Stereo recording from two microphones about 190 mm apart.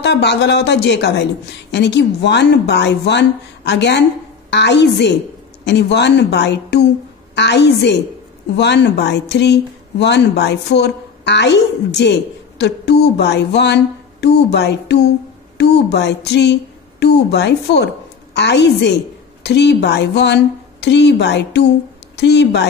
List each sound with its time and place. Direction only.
0.0 s speech: 65° left (ahead or behind)